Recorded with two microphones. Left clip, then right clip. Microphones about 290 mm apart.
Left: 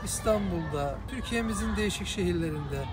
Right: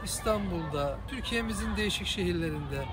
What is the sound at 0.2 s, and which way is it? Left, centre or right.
Speech, centre.